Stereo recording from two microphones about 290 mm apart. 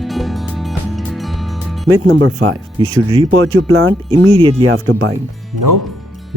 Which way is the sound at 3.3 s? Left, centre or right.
Right.